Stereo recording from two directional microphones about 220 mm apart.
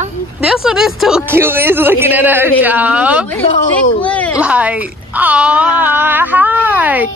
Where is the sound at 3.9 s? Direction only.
5° left (ahead or behind).